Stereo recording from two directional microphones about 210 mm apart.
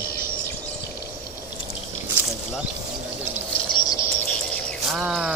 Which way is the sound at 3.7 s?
20° left (ahead or behind).